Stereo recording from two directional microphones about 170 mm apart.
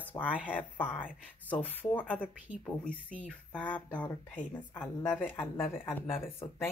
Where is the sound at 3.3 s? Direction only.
10° left (ahead or behind).